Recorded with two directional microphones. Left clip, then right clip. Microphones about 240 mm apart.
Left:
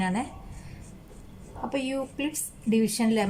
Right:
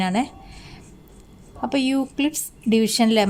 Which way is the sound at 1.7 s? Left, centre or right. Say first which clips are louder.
Right 8 dB; right.